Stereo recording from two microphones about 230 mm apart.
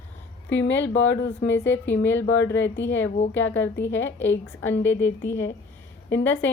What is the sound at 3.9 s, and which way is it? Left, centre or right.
A woman's voice, centre.